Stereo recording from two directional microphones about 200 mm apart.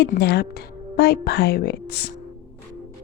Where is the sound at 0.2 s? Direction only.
55° left (ahead or behind).